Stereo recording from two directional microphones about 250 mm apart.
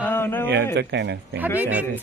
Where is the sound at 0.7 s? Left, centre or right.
Right.